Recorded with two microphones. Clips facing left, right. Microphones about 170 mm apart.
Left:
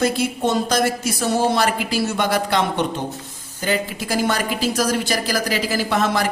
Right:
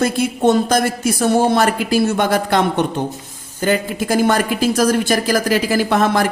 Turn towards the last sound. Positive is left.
turn(degrees=-50)  # may be behind; listen again after turning